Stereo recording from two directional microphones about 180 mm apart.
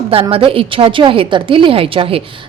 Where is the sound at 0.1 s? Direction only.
30° right (ahead or behind).